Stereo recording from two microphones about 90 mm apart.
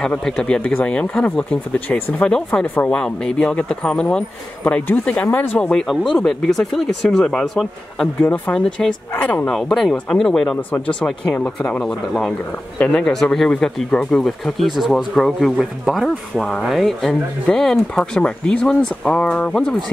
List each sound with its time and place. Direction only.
0.0 s speech: 10° left (ahead or behind)
2.6 s speech: 20° left (ahead or behind)
4.6 s speech: 20° left (ahead or behind)
5.6 s speech: 10° left (ahead or behind)
9.1 s speech: 20° left (ahead or behind)
9.5 s speech: 5° left (ahead or behind)
12.3 s speech: 15° left (ahead or behind)
13.0 s speech: 5° left (ahead or behind)